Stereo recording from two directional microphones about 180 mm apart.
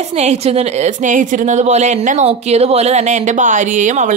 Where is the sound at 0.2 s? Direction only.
35° right (ahead or behind).